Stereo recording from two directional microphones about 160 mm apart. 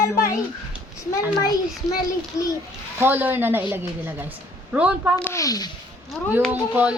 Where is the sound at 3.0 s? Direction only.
10° right (ahead or behind).